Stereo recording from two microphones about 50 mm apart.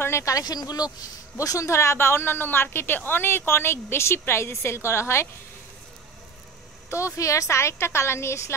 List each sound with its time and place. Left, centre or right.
0.0 s a sound: left
1.3 s speech: left
6.9 s a woman's voice: left